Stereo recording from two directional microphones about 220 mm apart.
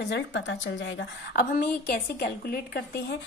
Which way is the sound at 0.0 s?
55° left (ahead or behind).